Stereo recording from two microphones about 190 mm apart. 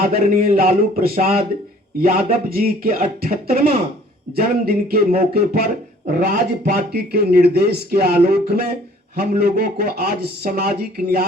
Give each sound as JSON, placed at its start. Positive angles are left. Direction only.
{"t": 0.0, "sound": "speech", "side_deg": -50}